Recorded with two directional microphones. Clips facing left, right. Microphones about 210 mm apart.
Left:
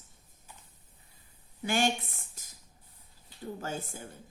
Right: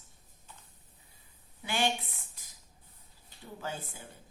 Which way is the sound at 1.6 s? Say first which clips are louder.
Left 3 dB; 45° left (ahead or behind).